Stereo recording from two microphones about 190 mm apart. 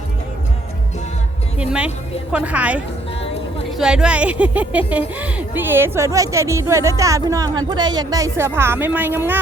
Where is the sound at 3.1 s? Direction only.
30° left (ahead or behind).